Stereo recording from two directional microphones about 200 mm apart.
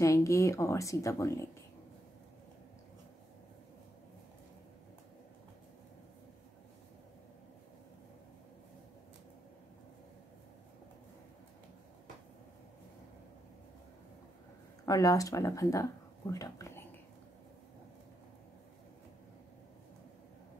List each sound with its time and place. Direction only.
0.0 s a woman's voice: 15° left (ahead or behind)
14.9 s speech: 15° left (ahead or behind)